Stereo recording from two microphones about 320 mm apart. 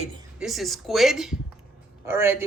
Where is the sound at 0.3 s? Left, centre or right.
Centre.